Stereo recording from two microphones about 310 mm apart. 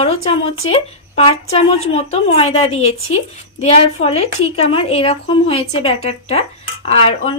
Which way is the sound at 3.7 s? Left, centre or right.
Centre.